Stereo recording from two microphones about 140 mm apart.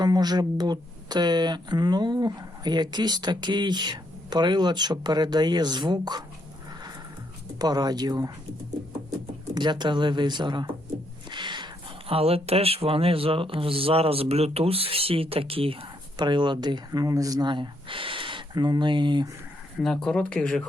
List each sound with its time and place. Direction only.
0.0 s speech: 30° right (ahead or behind)
7.6 s speech: 30° right (ahead or behind)
9.6 s speech: 30° right (ahead or behind)
19.8 s speech: 5° left (ahead or behind)